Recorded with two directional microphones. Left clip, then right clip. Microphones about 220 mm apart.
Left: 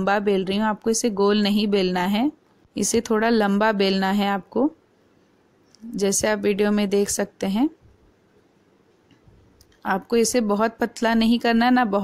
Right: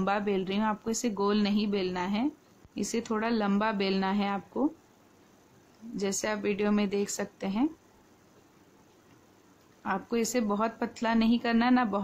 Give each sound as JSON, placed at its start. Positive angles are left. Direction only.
{"t": 0.0, "sound": "speech", "side_deg": 25}
{"t": 5.9, "sound": "speech", "side_deg": 25}
{"t": 9.8, "sound": "speech", "side_deg": 25}